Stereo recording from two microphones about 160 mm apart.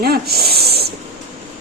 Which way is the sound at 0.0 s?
75° right (ahead or behind).